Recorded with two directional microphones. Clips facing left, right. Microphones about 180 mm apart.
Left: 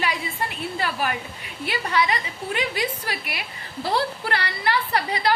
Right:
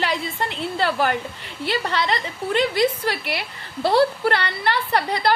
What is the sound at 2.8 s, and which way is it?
Speech, 70° right (ahead or behind).